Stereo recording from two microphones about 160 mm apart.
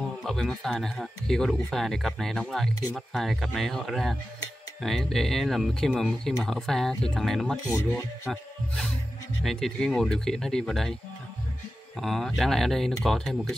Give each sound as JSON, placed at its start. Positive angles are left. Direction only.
{"t": 0.2, "sound": "speech", "side_deg": 0}
{"t": 7.6, "sound": "speech", "side_deg": 15}
{"t": 8.3, "sound": "music", "side_deg": 0}
{"t": 9.4, "sound": "speech", "side_deg": 0}
{"t": 12.0, "sound": "speech", "side_deg": 0}